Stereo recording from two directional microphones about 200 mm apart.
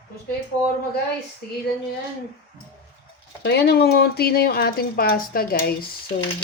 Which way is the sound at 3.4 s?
55° left (ahead or behind).